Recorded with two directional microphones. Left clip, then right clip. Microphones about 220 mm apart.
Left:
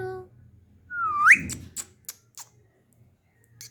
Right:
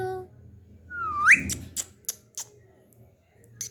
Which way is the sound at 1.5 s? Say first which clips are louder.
Right 4 dB; centre (ahead or behind).